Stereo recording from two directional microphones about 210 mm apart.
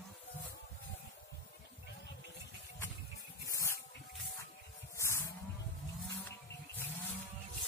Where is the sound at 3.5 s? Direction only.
15° left (ahead or behind).